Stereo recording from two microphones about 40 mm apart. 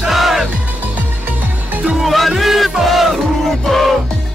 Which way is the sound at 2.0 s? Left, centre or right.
Centre.